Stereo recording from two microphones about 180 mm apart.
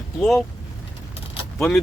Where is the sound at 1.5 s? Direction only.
Centre (ahead or behind).